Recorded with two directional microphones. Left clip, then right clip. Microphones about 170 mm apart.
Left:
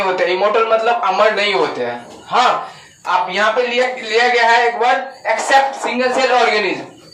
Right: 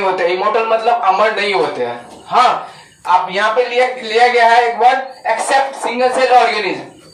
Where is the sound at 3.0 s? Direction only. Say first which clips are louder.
Right 2 dB; 20° left (ahead or behind).